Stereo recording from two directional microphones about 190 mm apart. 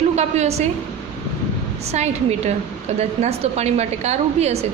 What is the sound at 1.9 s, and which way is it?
A woman's voice, 35° right (ahead or behind).